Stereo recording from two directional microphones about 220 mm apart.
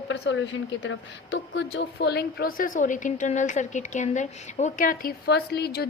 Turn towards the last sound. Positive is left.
turn(degrees=45)  # may be behind; listen again after turning